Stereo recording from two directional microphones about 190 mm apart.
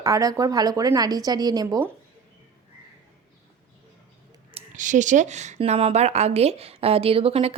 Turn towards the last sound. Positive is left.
turn(degrees=-30)  # may be behind; listen again after turning